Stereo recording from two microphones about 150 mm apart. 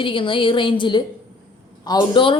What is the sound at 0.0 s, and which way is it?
A woman's voice, 35° left (ahead or behind).